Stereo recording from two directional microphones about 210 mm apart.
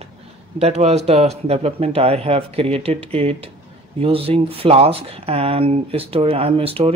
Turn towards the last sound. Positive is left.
turn(degrees=-30)  # may be behind; listen again after turning